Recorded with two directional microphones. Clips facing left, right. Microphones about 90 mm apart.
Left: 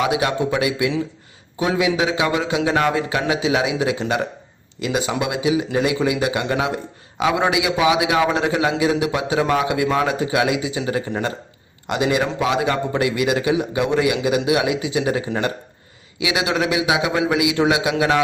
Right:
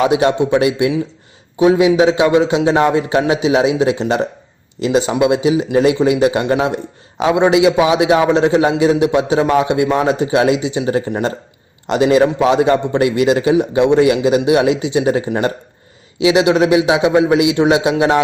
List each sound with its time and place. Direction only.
0.0 s a man's voice: 30° right (ahead or behind)